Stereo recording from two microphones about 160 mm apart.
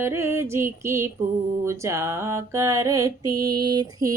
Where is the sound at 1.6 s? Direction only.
15° right (ahead or behind).